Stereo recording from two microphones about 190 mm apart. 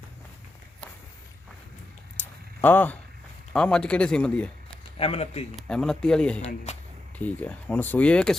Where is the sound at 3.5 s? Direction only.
5° left (ahead or behind).